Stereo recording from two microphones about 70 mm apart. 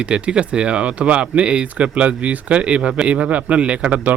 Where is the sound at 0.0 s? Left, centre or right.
Centre.